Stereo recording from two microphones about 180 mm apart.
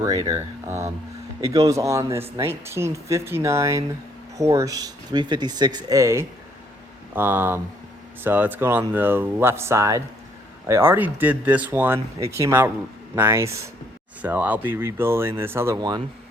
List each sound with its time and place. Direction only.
0.0 s speech: 20° right (ahead or behind)